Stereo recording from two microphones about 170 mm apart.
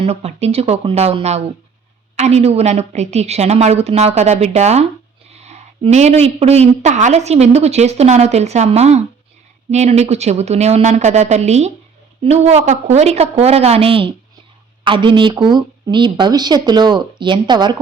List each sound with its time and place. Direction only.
0.0 s a woman's voice: 35° right (ahead or behind)